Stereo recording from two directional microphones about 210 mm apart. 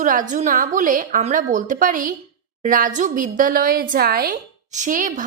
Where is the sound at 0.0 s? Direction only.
40° right (ahead or behind).